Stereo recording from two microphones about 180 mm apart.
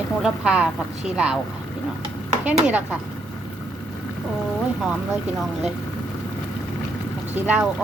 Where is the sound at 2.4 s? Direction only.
10° right (ahead or behind).